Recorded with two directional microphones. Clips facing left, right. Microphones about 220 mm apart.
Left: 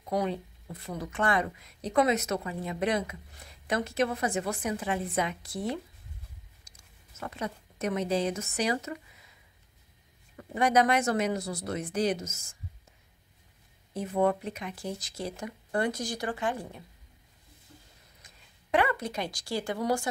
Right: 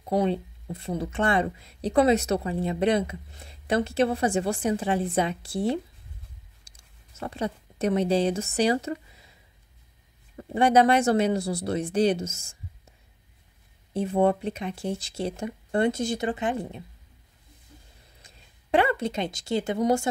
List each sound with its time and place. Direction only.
0.0 s speech: 25° right (ahead or behind)
7.2 s speech: 30° right (ahead or behind)
10.3 s speech: 30° right (ahead or behind)
13.9 s speech: 30° right (ahead or behind)
18.2 s speech: 30° right (ahead or behind)